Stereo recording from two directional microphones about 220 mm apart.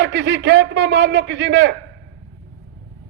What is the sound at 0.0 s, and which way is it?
A man's voice, 55° right (ahead or behind).